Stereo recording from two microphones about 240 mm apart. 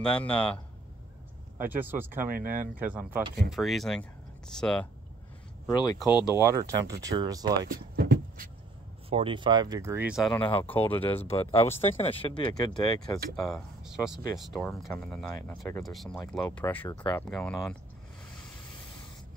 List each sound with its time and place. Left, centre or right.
0.0 s speech: centre
1.6 s speech: centre
2.3 s speech: right
2.8 s speech: centre
6.0 s speech: centre
6.3 s speech: centre
7.7 s speech: right
9.1 s speech: right; by 10.4 s centre
10.4 s speech: left
13.4 s speech: centre